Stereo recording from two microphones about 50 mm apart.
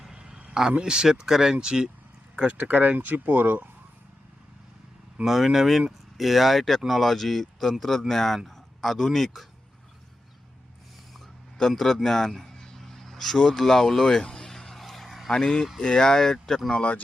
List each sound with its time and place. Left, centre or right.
0.0 s a sound: centre
0.8 s speech: centre
2.5 s speech: right
5.2 s a man's voice: centre
11.5 s a sound: centre
15.3 s speech: centre
16.7 s speech: left